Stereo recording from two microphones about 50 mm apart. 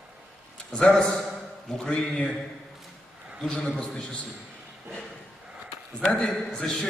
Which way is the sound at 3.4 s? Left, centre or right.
Left.